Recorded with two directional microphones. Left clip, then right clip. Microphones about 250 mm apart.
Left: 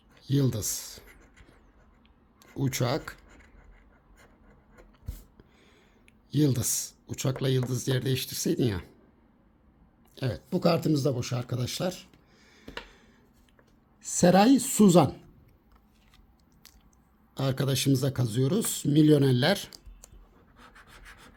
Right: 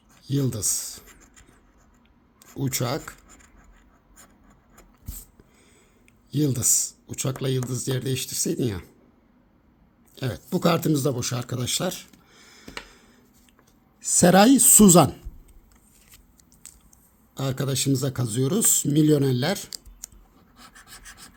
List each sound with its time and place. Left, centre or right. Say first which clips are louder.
0.2 s speech: right 2 dB; centre
2.4 s speech: right 2 dB; centre
6.3 s speech: right 4 dB; centre
10.2 s speech: right 3 dB; centre
12.5 s a sound: right 3 dB; centre
14.0 s speech: right 5 dB; centre
17.3 s speech: right 1 dB; centre
20.8 s rub: right 5 dB; centre